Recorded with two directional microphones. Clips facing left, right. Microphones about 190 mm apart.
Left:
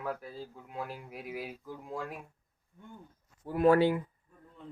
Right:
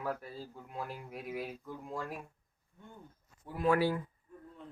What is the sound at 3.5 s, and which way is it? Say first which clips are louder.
Speech: left 9 dB; 40° left (ahead or behind).